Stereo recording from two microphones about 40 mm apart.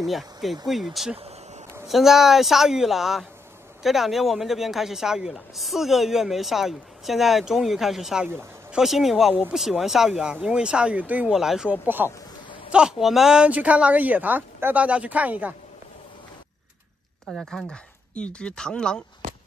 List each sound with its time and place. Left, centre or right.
0.0 s speech: centre
1.9 s speech: centre
10.4 s speech: right
11.0 s a woman's voice: right
11.3 s speech: centre
11.8 s speech: right
13.0 s speech: centre
13.5 s a woman's voice: right
17.3 s speech: centre
18.1 s speech: left